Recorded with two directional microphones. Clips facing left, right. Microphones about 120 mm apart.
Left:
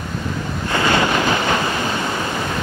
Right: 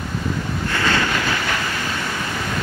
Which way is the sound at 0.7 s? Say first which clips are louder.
Left 4 dB; 20° left (ahead or behind).